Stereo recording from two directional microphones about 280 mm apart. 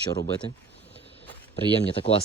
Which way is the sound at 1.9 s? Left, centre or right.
Centre.